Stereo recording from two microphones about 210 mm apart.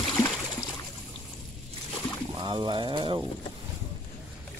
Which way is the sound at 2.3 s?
20° right (ahead or behind).